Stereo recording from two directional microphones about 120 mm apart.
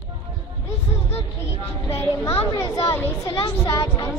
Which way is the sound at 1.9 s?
25° left (ahead or behind).